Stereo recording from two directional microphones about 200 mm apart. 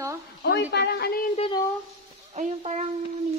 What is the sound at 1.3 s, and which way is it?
Speech, 30° left (ahead or behind).